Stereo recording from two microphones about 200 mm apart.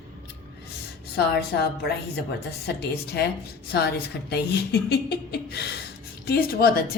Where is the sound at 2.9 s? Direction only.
55° left (ahead or behind).